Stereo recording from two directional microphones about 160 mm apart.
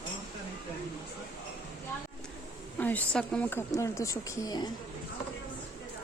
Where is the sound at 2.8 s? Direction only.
10° left (ahead or behind).